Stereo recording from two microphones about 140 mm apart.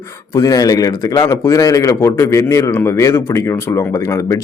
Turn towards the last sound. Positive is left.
turn(degrees=20)  # may be behind; listen again after turning